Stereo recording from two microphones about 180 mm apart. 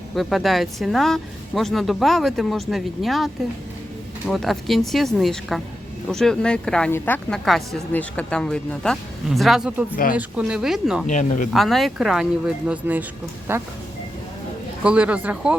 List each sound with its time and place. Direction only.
0.2 s a woman's voice: centre (ahead or behind)
4.3 s a woman's voice: centre (ahead or behind)
11.0 s speech: 40° left (ahead or behind)
11.5 s a woman's voice: centre (ahead or behind)
14.8 s speech: 10° right (ahead or behind)